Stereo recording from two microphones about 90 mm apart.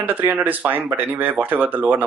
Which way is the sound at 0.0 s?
20° right (ahead or behind).